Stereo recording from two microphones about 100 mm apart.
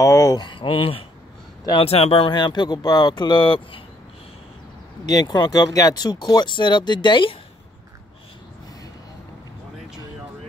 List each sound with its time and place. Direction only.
0.0 s a sound: 30° left (ahead or behind)
0.4 s speech: 55° left (ahead or behind)
1.7 s speech: 75° left (ahead or behind)
2.3 s speech: 45° left (ahead or behind)
5.0 s speech: 40° left (ahead or behind)